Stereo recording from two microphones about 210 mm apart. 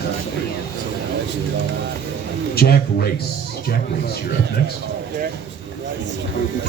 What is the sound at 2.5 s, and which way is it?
Speech, 50° left (ahead or behind).